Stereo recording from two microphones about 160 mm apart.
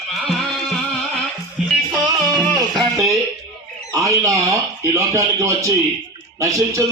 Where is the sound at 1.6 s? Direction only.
Centre (ahead or behind).